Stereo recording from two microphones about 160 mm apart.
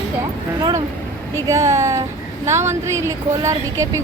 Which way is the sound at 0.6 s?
25° right (ahead or behind).